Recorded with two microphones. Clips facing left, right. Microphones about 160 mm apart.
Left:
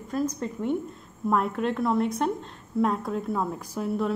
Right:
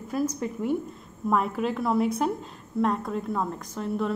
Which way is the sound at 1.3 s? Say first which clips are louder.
Even; centre (ahead or behind).